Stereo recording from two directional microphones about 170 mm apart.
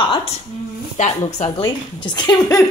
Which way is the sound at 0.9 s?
45° left (ahead or behind).